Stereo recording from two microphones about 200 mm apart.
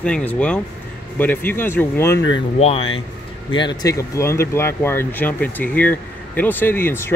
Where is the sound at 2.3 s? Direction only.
30° left (ahead or behind).